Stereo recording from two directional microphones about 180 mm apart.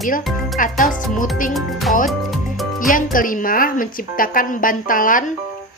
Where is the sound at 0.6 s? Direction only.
50° left (ahead or behind).